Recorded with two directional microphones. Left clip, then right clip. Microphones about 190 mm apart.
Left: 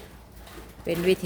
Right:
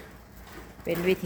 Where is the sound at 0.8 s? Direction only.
20° left (ahead or behind).